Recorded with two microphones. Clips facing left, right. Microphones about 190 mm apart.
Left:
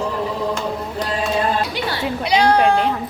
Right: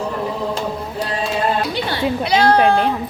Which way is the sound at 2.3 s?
15° left (ahead or behind).